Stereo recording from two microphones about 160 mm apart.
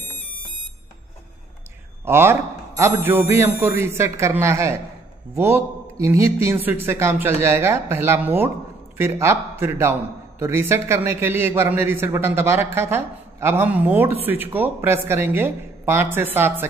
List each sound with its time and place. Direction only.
2.0 s a man's voice: 15° right (ahead or behind)